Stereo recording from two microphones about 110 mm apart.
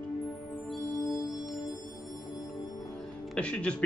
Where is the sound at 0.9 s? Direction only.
35° left (ahead or behind).